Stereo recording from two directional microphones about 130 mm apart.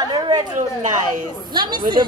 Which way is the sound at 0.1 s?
30° right (ahead or behind).